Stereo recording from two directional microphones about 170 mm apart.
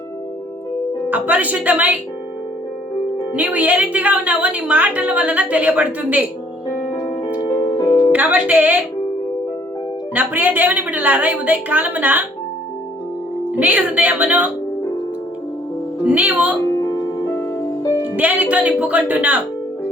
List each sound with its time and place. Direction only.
1.1 s a woman's voice: 10° right (ahead or behind)
3.3 s a woman's voice: 10° right (ahead or behind)
7.3 s music: 25° left (ahead or behind)
8.1 s speech: 10° right (ahead or behind)
10.2 s a woman's voice: 10° right (ahead or behind)
13.5 s a woman's voice: 10° right (ahead or behind)
16.0 s a woman's voice: 10° right (ahead or behind)
16.6 s music: 15° left (ahead or behind)
18.2 s a woman's voice: 10° right (ahead or behind)